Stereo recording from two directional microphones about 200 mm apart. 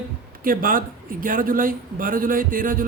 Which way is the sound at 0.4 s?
45° right (ahead or behind).